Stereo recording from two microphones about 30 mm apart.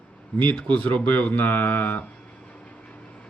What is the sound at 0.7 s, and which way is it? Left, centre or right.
Speech, left.